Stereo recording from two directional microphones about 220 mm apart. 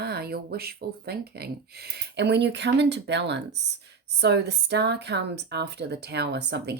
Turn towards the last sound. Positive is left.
turn(degrees=-50)  # may be behind; listen again after turning